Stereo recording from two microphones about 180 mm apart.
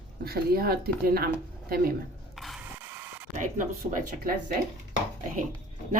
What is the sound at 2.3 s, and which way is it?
Mechanisms, centre (ahead or behind).